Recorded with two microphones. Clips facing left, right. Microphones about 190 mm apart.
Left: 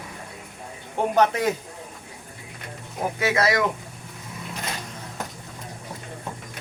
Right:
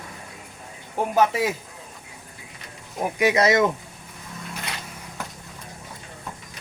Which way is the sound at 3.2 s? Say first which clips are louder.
Right 4 dB; 20° right (ahead or behind).